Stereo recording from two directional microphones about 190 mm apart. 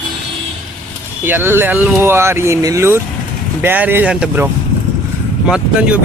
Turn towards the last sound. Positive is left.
turn(degrees=-5)  # may be behind; listen again after turning